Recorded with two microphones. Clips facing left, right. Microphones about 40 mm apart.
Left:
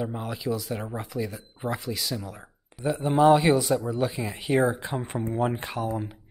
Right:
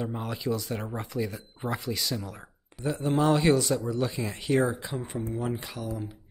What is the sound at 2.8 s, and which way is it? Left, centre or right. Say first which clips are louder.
Speech: left 5 dB; centre.